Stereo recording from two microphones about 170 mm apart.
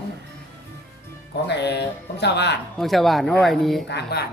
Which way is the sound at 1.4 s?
90° left.